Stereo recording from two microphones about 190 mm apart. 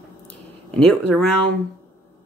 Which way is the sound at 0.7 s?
5° left (ahead or behind).